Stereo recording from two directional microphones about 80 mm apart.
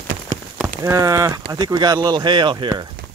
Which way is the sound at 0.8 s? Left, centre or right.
Right.